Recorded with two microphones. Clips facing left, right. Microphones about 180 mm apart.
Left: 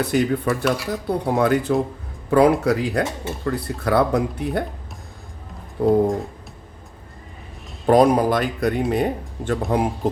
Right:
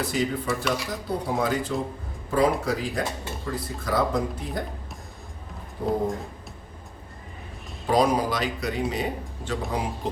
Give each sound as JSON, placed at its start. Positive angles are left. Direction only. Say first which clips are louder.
{"t": 0.0, "sound": "speech", "louder": "left 6 dB", "side_deg": 65}
{"t": 5.8, "sound": "speech", "louder": "left 9 dB", "side_deg": 70}
{"t": 7.9, "sound": "speech", "louder": "left 7 dB", "side_deg": 55}